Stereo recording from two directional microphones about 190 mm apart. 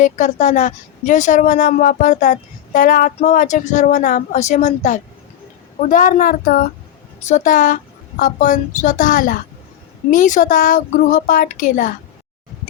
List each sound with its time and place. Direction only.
0.0 s a woman's voice: 40° left (ahead or behind)